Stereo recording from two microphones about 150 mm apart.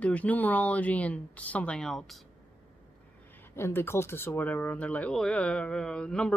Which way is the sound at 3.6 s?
15° left (ahead or behind).